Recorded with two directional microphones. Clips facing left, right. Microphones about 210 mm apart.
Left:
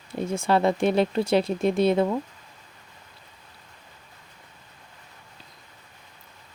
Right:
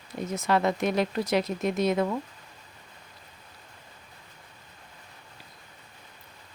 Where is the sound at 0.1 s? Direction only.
30° left (ahead or behind).